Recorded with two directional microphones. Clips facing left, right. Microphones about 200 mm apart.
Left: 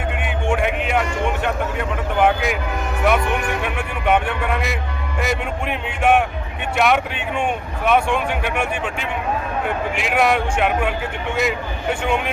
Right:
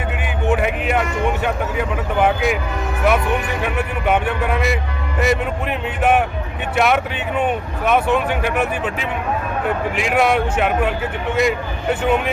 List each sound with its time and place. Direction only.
0.1 s speech: 5° right (ahead or behind)
3.6 s speech: 5° right (ahead or behind)